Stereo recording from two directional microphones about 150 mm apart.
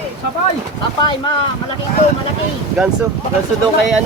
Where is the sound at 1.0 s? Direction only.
30° left (ahead or behind).